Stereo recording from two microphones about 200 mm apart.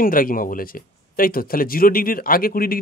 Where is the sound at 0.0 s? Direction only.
45° left (ahead or behind).